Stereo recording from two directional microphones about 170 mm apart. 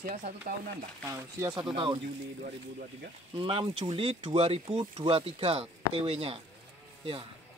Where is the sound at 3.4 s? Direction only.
30° right (ahead or behind).